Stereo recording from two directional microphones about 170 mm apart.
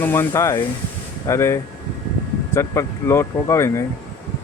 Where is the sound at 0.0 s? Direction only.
15° left (ahead or behind).